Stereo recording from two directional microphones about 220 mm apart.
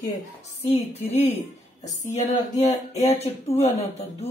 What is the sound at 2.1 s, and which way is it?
Mantra, 30° left (ahead or behind).